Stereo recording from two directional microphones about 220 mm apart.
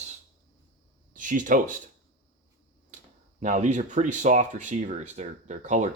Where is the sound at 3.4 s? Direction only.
35° right (ahead or behind).